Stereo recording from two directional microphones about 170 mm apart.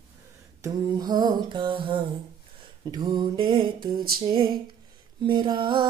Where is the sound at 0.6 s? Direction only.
20° right (ahead or behind).